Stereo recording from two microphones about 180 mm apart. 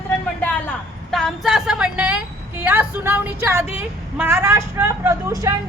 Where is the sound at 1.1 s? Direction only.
Centre (ahead or behind).